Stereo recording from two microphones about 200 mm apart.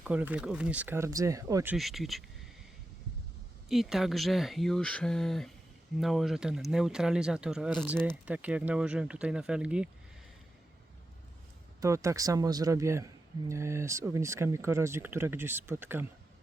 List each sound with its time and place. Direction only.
0.0 s speech: 5° right (ahead or behind)
1.7 s speech: centre (ahead or behind)
3.7 s speech: centre (ahead or behind)
11.8 s speech: 15° right (ahead or behind)